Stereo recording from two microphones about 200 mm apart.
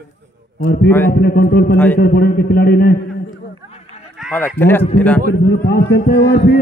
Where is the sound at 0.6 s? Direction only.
45° left (ahead or behind).